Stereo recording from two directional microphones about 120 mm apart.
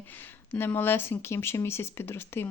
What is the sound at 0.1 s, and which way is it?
Speech, 15° left (ahead or behind).